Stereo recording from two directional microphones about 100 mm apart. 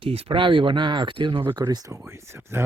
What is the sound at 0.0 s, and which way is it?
Speech, 70° right (ahead or behind).